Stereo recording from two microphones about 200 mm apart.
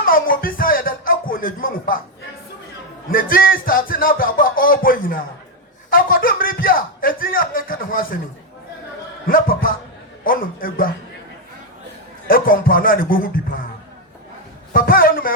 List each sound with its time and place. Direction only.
0.0 s music: 45° left (ahead or behind)
3.1 s music: 45° left (ahead or behind)
5.9 s a sound: 45° left (ahead or behind)
9.2 s music: 45° left (ahead or behind)
12.3 s speech: 45° left (ahead or behind)
14.7 s a sound: 45° left (ahead or behind)